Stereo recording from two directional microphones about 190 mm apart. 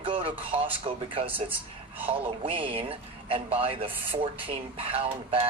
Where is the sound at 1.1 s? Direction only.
30° right (ahead or behind).